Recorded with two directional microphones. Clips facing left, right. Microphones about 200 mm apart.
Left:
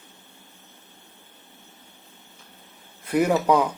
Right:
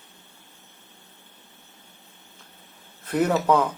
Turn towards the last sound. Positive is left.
turn(degrees=15)  # may be behind; listen again after turning